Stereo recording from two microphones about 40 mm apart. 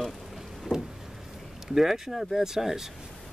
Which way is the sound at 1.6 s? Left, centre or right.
Centre.